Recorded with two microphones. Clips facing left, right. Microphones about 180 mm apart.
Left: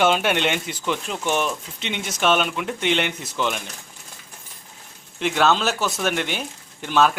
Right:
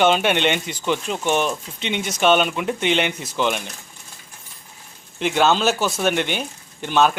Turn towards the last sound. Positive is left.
turn(degrees=0)  # may be behind; listen again after turning